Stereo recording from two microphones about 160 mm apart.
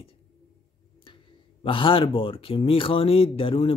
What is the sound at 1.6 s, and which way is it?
Speech, 30° left (ahead or behind).